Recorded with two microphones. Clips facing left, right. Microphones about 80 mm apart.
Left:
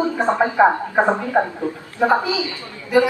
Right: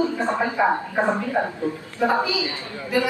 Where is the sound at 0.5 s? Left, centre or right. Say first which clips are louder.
Left 5 dB; left.